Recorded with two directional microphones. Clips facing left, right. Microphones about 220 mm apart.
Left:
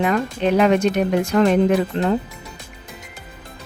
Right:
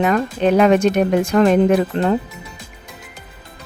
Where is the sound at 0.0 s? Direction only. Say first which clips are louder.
Right 3 dB; 50° right (ahead or behind).